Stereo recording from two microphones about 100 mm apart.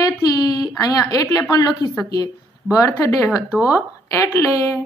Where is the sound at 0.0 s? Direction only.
40° left (ahead or behind).